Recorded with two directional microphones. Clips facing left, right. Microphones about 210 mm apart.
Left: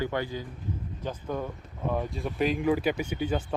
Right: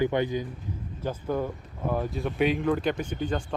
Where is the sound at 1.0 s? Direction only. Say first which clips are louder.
Right 4 dB; 5° right (ahead or behind).